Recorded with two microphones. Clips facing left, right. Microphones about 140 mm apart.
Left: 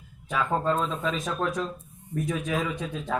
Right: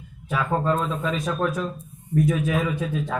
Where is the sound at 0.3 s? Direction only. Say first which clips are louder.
Right 2 dB; 5° right (ahead or behind).